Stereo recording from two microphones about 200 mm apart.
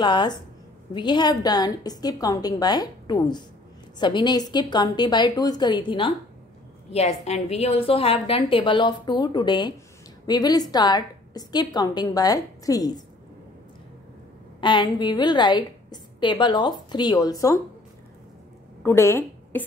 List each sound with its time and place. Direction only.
0.0 s a woman's voice: 20° left (ahead or behind)
14.6 s a woman's voice: 20° left (ahead or behind)
18.8 s a woman's voice: 10° left (ahead or behind)